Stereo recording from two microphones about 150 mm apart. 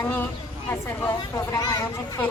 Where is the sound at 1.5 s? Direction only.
20° left (ahead or behind).